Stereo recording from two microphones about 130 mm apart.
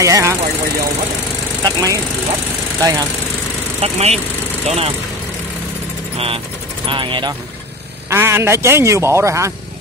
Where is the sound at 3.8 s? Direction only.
50° right (ahead or behind).